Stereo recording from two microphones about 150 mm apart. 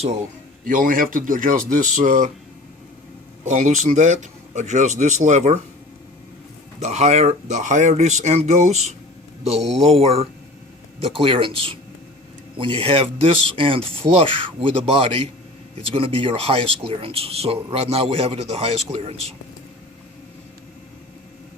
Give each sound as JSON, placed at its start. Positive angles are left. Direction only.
{"t": 0.7, "sound": "speech", "side_deg": -65}
{"t": 2.0, "sound": "speech", "side_deg": -55}
{"t": 3.4, "sound": "speech", "side_deg": -50}
{"t": 6.7, "sound": "speech", "side_deg": -50}